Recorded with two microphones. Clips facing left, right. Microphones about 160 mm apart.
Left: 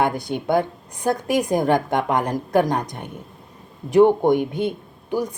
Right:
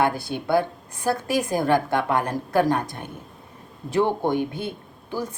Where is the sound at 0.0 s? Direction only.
20° left (ahead or behind).